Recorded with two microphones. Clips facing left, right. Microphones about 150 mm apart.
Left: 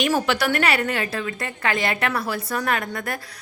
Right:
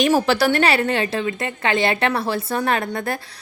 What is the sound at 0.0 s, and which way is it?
A woman's voice, 35° right (ahead or behind).